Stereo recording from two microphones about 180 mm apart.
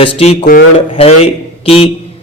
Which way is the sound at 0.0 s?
35° left (ahead or behind).